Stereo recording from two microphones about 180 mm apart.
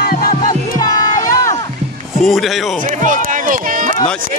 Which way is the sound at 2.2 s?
Centre (ahead or behind).